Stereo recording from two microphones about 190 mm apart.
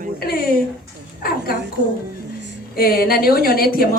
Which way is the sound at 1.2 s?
50° left (ahead or behind).